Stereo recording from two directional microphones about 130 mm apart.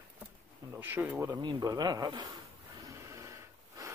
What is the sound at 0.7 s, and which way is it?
Speech, 15° right (ahead or behind).